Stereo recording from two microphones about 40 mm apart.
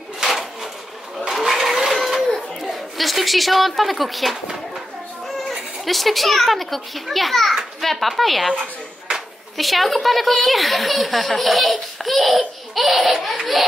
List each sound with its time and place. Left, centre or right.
1.4 s vehicle: centre
2.6 s a woman's voice: centre
5.5 s speech: centre
9.1 s a sound: right
9.6 s speech: centre
12.7 s laughter: centre